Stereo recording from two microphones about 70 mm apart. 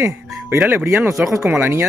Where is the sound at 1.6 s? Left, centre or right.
Right.